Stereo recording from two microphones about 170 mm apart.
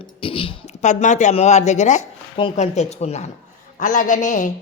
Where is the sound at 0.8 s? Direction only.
45° left (ahead or behind).